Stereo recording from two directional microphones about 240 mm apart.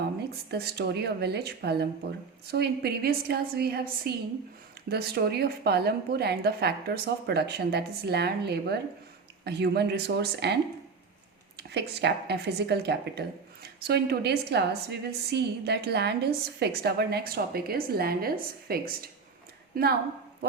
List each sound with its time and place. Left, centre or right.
0.5 s a woman's voice: right